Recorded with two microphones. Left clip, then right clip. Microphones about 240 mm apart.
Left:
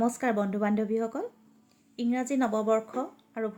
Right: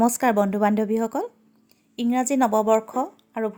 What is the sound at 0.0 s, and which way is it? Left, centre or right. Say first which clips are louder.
Speech: right 8 dB; right.